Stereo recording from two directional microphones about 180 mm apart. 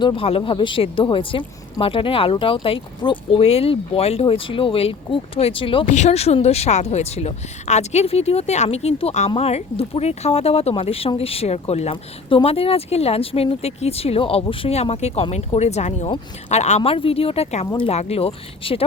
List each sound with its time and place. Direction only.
0.0 s speech: 30° left (ahead or behind)
5.8 s speech: 40° left (ahead or behind)